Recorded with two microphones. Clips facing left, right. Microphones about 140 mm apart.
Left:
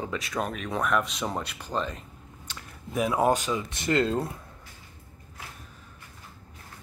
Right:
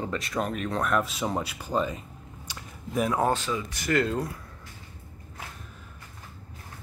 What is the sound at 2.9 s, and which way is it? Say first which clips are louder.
Speech: even; centre (ahead or behind).